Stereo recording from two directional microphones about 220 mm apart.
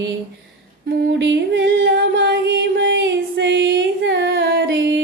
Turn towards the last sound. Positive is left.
turn(degrees=-55)  # may be behind; listen again after turning